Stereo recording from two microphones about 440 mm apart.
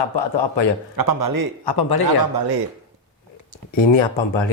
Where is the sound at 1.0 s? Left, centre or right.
Right.